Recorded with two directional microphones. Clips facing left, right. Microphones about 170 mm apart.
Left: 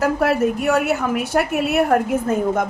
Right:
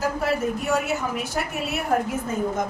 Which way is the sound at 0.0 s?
65° left (ahead or behind).